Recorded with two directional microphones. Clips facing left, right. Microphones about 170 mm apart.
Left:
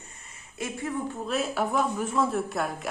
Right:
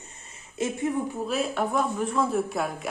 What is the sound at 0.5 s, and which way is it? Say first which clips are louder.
Speech: right 6 dB; 20° right (ahead or behind).